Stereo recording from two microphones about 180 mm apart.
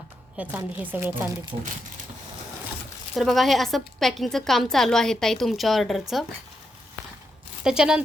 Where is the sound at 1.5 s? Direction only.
30° right (ahead or behind).